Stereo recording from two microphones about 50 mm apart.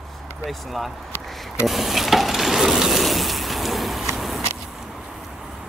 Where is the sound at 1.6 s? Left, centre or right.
Centre.